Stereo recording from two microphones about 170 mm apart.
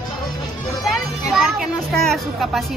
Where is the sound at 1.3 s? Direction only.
Centre (ahead or behind).